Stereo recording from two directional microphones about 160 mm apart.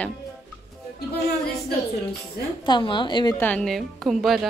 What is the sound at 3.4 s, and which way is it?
A woman's voice, 5° left (ahead or behind).